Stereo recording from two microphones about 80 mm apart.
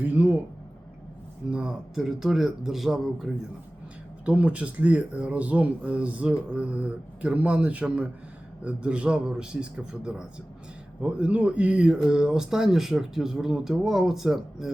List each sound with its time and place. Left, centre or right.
0.0 s speech: right
1.5 s a man's voice: centre
4.3 s speech: centre